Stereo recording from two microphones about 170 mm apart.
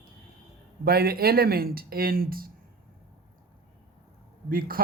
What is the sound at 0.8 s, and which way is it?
Speech, 65° right (ahead or behind).